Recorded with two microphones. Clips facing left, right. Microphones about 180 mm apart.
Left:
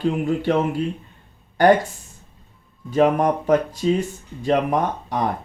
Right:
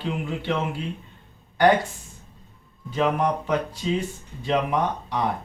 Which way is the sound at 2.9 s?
45° left (ahead or behind).